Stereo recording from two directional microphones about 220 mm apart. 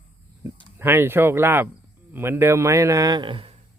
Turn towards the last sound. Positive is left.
turn(degrees=-20)  # may be behind; listen again after turning